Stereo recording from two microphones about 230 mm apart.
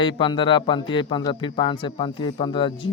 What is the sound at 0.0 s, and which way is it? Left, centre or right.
A man's voice, left.